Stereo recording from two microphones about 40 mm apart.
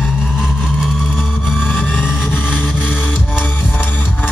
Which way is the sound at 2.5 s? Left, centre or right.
Left.